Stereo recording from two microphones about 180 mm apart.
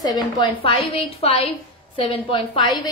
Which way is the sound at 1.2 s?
35° left (ahead or behind).